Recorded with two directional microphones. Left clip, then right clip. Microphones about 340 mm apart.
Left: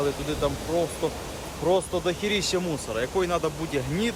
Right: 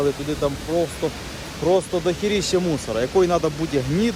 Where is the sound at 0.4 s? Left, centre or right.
Centre.